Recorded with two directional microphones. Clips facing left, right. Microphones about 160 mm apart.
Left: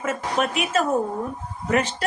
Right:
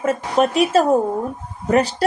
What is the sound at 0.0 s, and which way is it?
A woman's voice, 35° right (ahead or behind).